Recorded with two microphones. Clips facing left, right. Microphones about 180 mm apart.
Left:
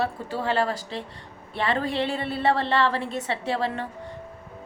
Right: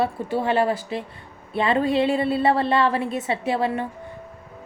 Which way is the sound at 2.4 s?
10° right (ahead or behind).